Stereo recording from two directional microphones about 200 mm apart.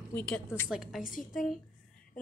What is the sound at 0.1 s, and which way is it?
Speech, 5° left (ahead or behind).